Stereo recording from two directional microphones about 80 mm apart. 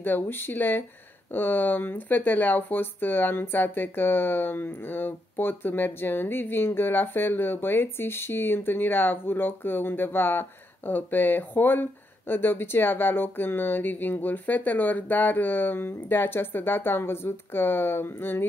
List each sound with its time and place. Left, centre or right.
0.0 s speech: left